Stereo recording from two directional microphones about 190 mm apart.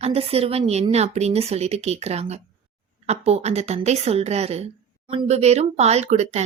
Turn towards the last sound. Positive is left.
turn(degrees=-35)  # may be behind; listen again after turning